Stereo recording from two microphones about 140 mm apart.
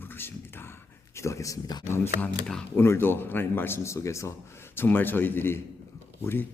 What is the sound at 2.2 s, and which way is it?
Speech, 10° left (ahead or behind).